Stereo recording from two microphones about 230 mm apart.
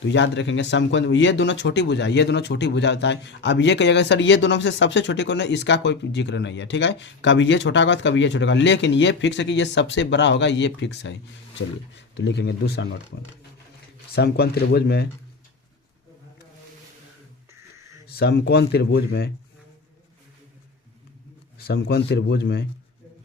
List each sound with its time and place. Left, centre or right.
0.1 s speech: left
14.2 s speech: left
18.1 s speech: left
21.6 s speech: left